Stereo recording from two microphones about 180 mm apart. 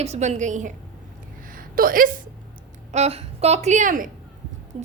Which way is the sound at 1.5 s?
50° right (ahead or behind).